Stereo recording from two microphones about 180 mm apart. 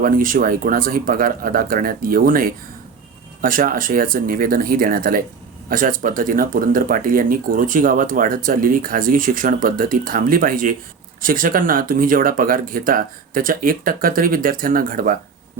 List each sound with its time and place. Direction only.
0.0 s speech: 50° right (ahead or behind)